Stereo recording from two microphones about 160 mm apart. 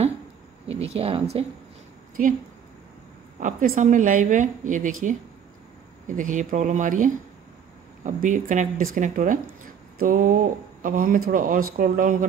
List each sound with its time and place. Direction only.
0.7 s speech: 40° right (ahead or behind)
3.3 s a woman's voice: 60° right (ahead or behind)